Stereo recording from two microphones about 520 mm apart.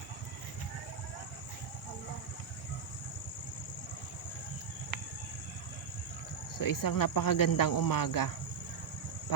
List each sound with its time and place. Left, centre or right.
6.6 s speech: left